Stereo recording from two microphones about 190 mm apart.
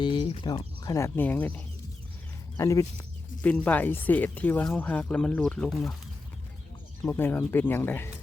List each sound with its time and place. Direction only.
0.0 s speech: 25° left (ahead or behind); by 5.9 s 5° left (ahead or behind)
7.0 s speech: 10° left (ahead or behind)